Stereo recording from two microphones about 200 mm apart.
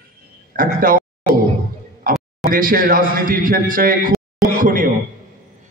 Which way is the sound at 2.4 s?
45° right (ahead or behind).